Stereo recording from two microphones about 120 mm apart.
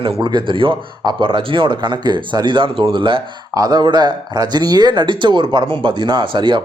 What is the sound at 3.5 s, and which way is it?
A man's voice, 35° right (ahead or behind).